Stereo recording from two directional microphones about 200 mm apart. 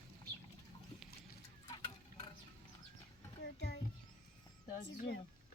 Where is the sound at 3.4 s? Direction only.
60° left (ahead or behind).